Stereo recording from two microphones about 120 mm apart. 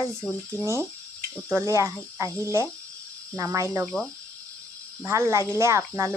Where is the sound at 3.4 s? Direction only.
25° right (ahead or behind).